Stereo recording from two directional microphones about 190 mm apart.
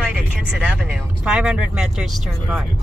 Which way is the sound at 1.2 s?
5° right (ahead or behind).